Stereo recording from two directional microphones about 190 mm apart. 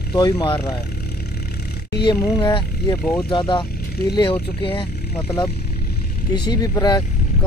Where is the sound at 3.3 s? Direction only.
25° left (ahead or behind).